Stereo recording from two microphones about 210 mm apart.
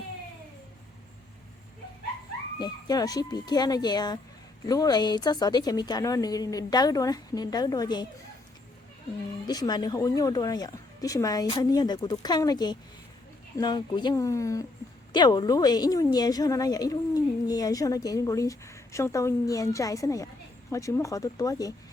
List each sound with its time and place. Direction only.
2.6 s a woman's voice: 20° left (ahead or behind)
9.5 s a woman's voice: 20° left (ahead or behind)